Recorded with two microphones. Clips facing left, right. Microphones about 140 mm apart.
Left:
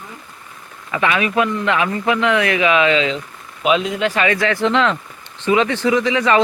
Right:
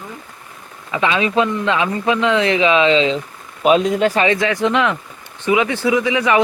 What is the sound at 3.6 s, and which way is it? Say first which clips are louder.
Speech: right 4 dB; 40° right (ahead or behind).